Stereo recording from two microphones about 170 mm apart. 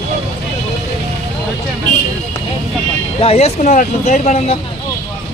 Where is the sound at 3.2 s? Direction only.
35° left (ahead or behind).